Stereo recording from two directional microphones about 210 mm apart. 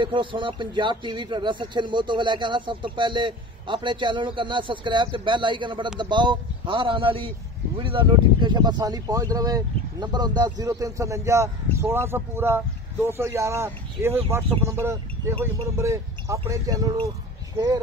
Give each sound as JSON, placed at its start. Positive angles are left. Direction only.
{"t": 0.0, "sound": "speech", "side_deg": -25}